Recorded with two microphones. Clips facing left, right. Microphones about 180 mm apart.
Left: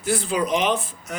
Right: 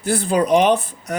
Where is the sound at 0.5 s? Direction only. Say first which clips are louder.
Right 7 dB; 40° right (ahead or behind).